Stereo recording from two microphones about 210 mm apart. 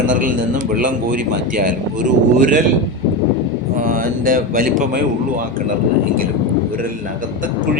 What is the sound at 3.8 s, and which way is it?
Speech, 40° right (ahead or behind).